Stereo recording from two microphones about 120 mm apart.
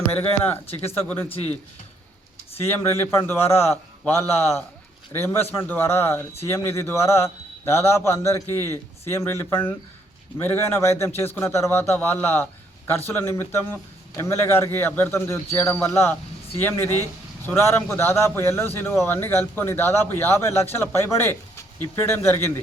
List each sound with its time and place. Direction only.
0.2 s speech: 15° left (ahead or behind)
0.7 s speech: 55° left (ahead or behind)
1.0 s speech: 15° left (ahead or behind)
3.0 s a man's voice: 20° left (ahead or behind)